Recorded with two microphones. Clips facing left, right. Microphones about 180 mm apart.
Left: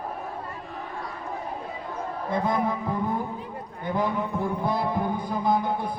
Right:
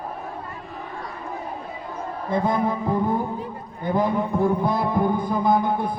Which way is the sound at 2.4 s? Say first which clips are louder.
Right 3 dB; 30° right (ahead or behind).